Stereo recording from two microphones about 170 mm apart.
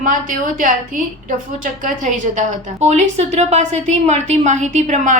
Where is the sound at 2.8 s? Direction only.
40° right (ahead or behind).